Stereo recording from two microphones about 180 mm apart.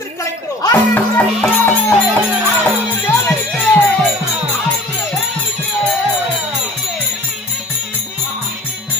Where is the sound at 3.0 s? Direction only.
15° left (ahead or behind).